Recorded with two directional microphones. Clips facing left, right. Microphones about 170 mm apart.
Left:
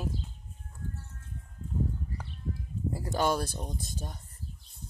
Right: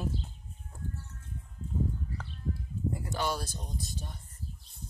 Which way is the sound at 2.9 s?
35° left (ahead or behind).